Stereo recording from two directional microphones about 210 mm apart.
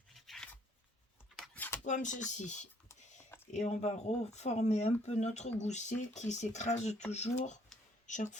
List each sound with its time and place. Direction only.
0.1 s rub: centre (ahead or behind)
1.4 s a sound: 10° left (ahead or behind)
1.8 s speech: 35° left (ahead or behind)